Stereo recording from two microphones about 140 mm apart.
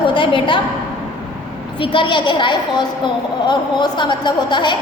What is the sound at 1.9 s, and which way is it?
A woman's voice, 35° left (ahead or behind).